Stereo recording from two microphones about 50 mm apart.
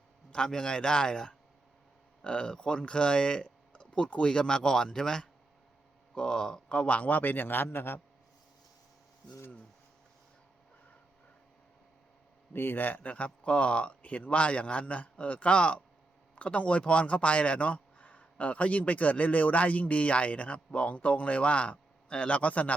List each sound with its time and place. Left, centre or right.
0.3 s a man's voice: centre; by 8.0 s left
12.5 s speech: left